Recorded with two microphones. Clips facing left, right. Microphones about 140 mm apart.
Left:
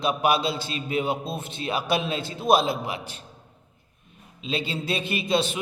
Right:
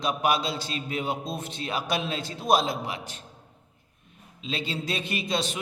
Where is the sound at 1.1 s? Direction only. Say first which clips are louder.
Left 3 dB; 60° left (ahead or behind).